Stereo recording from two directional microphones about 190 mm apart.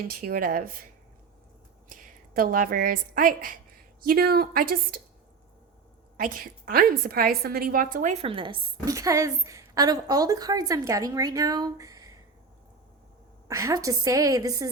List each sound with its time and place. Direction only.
0.0 s a woman's voice: 50° right (ahead or behind)
1.9 s a woman's voice: 50° right (ahead or behind)
6.1 s a woman's voice: 50° right (ahead or behind); by 12.1 s 20° right (ahead or behind)
13.5 s a woman's voice: 15° right (ahead or behind)